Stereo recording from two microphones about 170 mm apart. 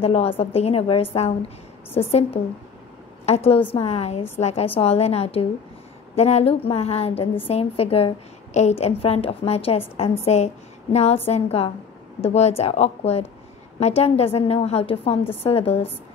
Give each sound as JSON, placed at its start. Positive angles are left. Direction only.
{"t": 0.0, "sound": "a woman's voice", "side_deg": 35}